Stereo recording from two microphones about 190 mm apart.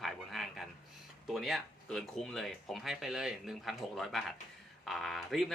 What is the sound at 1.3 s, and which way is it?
Speech, centre (ahead or behind).